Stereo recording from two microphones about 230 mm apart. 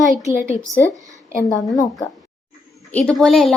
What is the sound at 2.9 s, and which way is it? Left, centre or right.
Speech, centre.